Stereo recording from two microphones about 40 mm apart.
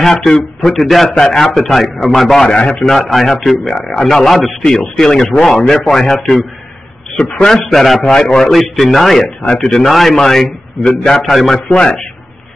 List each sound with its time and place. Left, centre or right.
0.0 s a man's voice: centre
2.4 s a man's voice: left
2.8 s a man's voice: centre
7.5 s speech: centre
8.0 s a man's voice: left
8.5 s speech: centre
9.4 s a man's voice: left
9.8 s a man's voice: centre
10.8 s a man's voice: left
11.2 s speech: centre
11.7 s a man's voice: left